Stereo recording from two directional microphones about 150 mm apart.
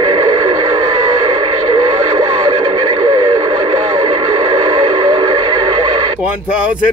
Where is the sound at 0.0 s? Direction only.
35° right (ahead or behind).